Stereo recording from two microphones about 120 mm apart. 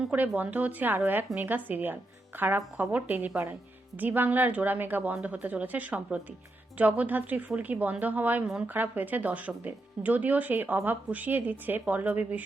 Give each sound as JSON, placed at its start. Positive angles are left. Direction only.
{"t": 0.0, "sound": "a woman's voice", "side_deg": -15}